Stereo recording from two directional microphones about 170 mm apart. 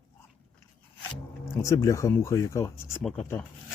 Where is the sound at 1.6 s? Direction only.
20° left (ahead or behind).